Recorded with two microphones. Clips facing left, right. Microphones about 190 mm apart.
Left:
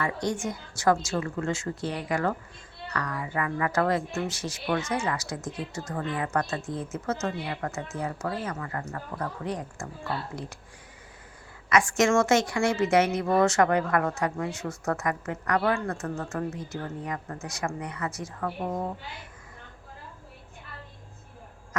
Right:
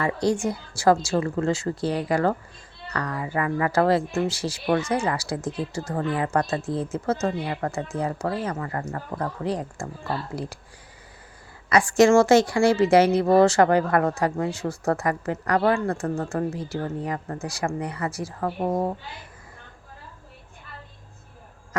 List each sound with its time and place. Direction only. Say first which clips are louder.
0.0 s speech: right 6 dB; 30° right (ahead or behind)
11.7 s speech: right 6 dB; 35° right (ahead or behind)